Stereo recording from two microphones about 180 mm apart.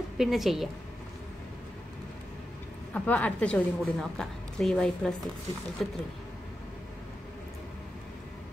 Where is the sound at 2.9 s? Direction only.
10° left (ahead or behind).